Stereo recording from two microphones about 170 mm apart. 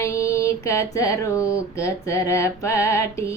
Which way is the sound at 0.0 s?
20° left (ahead or behind).